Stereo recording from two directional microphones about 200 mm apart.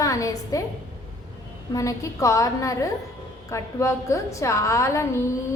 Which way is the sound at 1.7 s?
15° left (ahead or behind).